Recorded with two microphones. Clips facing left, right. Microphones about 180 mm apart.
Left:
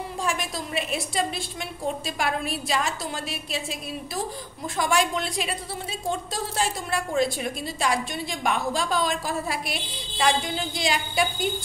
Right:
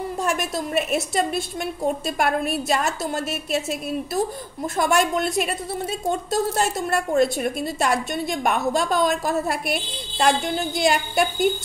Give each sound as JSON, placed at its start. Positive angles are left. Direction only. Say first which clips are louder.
{"t": 0.2, "sound": "a woman's voice", "louder": "right 4 dB", "side_deg": -45}
{"t": 4.7, "sound": "a woman's voice", "louder": "right 4 dB", "side_deg": -50}